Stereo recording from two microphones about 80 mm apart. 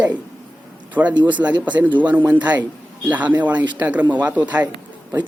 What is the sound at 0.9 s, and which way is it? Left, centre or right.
Speech, centre.